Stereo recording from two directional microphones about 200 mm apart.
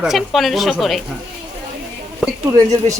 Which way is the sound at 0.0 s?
Centre (ahead or behind).